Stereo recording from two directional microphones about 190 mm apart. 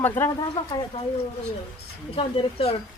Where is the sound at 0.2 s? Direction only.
10° left (ahead or behind).